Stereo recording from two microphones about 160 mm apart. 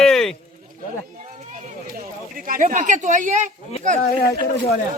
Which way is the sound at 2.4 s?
60° right (ahead or behind).